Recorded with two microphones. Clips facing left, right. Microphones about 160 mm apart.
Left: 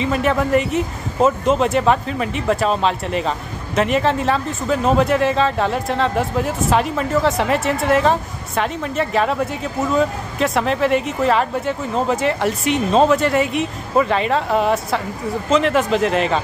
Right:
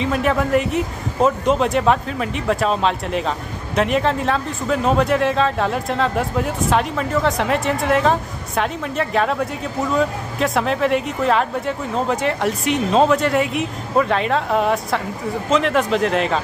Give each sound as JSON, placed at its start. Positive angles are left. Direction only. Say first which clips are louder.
{"t": 0.0, "sound": "speech", "louder": "left 1 dB", "side_deg": 0}